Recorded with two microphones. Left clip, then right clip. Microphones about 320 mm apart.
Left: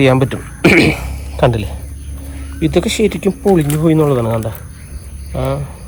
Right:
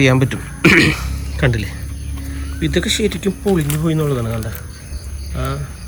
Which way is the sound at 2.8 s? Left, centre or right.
Left.